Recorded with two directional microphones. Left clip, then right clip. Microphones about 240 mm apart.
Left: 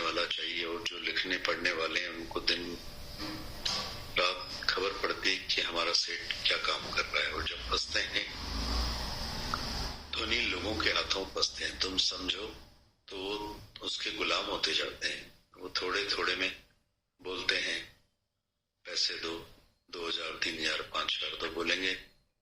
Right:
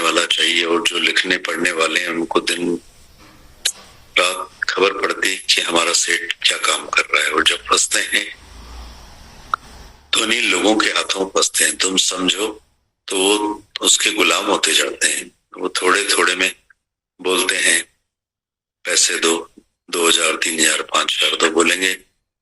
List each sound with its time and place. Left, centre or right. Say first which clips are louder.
0.0 s speech: right 17 dB; right
4.1 s speech: right 14 dB; right
10.1 s speech: right 16 dB; right